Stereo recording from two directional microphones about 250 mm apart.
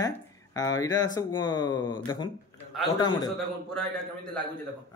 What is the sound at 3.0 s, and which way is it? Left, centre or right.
Speech, centre.